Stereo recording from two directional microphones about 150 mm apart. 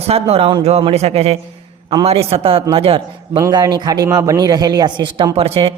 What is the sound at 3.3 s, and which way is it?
Speech, 25° right (ahead or behind).